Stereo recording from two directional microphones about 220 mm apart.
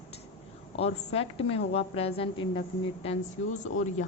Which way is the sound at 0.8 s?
25° left (ahead or behind).